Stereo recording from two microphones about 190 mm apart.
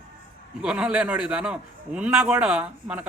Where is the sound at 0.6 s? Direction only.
5° right (ahead or behind).